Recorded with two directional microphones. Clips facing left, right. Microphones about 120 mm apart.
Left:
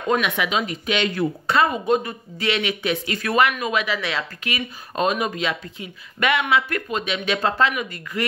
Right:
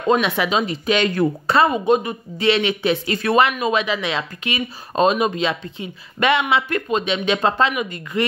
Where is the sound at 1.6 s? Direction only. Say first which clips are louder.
Right 3 dB; 20° right (ahead or behind).